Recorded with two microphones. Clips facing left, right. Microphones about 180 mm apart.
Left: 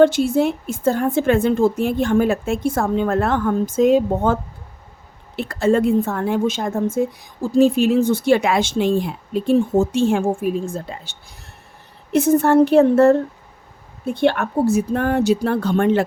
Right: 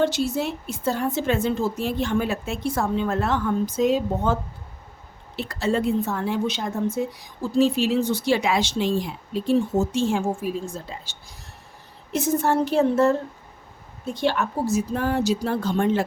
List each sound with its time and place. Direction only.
0.0 s speech: 55° left (ahead or behind)
5.4 s speech: 50° left (ahead or behind)